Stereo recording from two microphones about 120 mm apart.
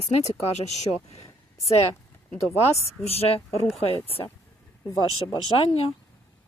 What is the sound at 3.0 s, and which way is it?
Speech, 55° left (ahead or behind).